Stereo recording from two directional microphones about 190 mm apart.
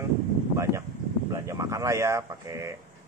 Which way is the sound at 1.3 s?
15° right (ahead or behind).